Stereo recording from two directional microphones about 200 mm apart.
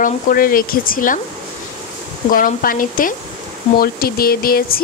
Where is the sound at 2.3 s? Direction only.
45° left (ahead or behind).